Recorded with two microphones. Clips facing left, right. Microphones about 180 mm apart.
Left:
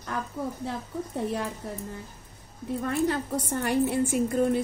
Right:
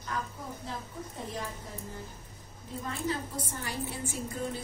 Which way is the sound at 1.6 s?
65° left (ahead or behind).